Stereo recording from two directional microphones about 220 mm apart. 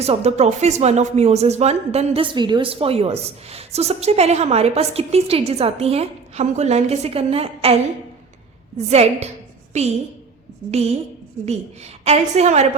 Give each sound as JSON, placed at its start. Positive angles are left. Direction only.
{"t": 0.0, "sound": "speech", "side_deg": -30}
{"t": 8.9, "sound": "speech", "side_deg": -30}
{"t": 10.7, "sound": "speech", "side_deg": -30}